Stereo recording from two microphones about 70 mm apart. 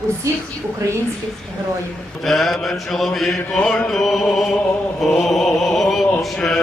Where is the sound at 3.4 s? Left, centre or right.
Centre.